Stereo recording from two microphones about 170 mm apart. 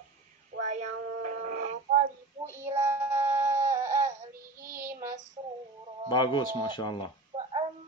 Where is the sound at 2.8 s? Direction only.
15° right (ahead or behind).